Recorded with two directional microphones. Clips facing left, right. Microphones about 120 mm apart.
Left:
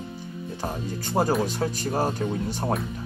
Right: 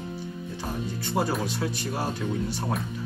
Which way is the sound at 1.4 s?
40° left (ahead or behind).